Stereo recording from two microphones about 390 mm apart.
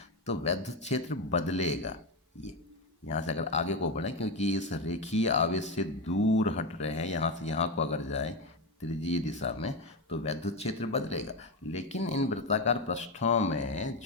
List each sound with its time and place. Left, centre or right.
0.3 s speech: centre
3.1 s speech: centre
6.1 s speech: left
6.4 s speech: centre